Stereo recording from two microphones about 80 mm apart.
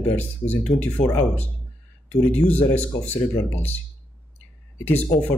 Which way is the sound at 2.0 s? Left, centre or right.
Centre.